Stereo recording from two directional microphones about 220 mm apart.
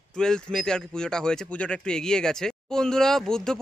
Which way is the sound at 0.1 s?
5° left (ahead or behind).